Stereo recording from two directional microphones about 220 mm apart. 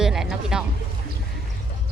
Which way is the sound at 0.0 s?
Centre (ahead or behind).